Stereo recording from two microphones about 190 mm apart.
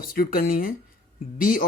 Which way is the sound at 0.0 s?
50° left (ahead or behind).